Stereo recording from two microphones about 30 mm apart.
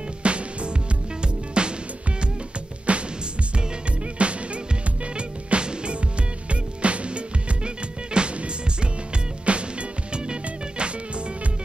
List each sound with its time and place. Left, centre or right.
0.2 s music: right
2.9 s music: right
4.2 s music: right
6.5 s music: right
9.5 s music: right